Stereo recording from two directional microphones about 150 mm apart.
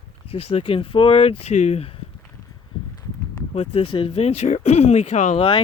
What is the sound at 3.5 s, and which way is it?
Speech, 45° left (ahead or behind).